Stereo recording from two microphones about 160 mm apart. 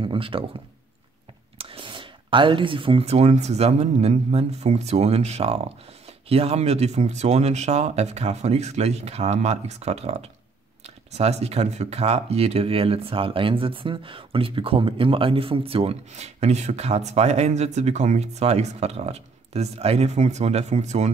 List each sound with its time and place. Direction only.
0.0 s speech: 35° right (ahead or behind)
1.6 s speech: 35° right (ahead or behind)